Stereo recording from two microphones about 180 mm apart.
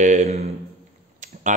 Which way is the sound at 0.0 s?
45° right (ahead or behind).